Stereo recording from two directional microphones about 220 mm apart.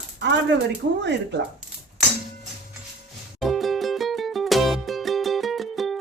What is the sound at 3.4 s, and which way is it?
Music, centre (ahead or behind).